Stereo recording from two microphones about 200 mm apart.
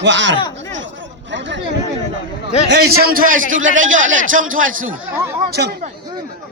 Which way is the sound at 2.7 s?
50° right (ahead or behind).